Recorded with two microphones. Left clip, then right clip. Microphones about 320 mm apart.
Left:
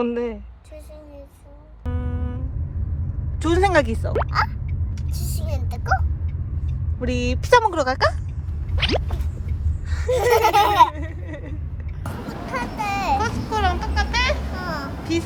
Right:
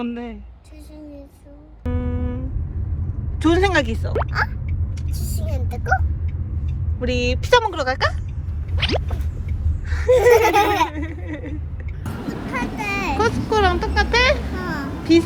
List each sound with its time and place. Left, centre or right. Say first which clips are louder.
0.1 s laughter: left 7 dB; centre
1.8 s music: right 5 dB; centre
3.4 s a woman's voice: right 1 dB; centre
4.3 s laughter: left 1 dB; centre
7.0 s a woman's voice: right 3 dB; centre
8.8 s zipper: even; centre
9.9 s laughter: right 5 dB; centre
12.5 s a sound: even; centre